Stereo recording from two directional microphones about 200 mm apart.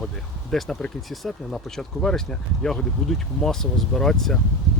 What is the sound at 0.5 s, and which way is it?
Speech, centre (ahead or behind).